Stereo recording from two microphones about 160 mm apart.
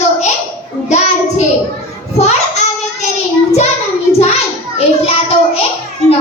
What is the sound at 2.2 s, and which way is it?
Speech, 45° left (ahead or behind).